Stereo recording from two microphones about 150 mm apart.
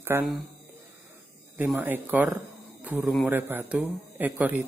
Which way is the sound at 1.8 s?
10° right (ahead or behind).